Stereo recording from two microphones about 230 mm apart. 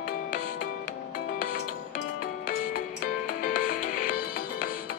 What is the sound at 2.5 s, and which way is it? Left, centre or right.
Music, left.